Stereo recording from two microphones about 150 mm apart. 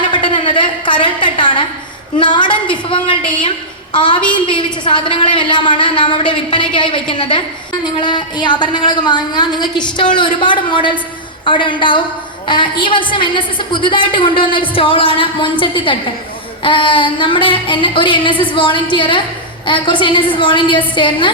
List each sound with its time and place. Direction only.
0.1 s a sound: 35° left (ahead or behind)
2.1 s a woman's voice: 30° left (ahead or behind)
3.9 s a woman's voice: 30° left (ahead or behind)